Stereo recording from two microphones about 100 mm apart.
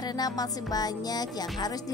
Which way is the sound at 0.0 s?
40° left (ahead or behind).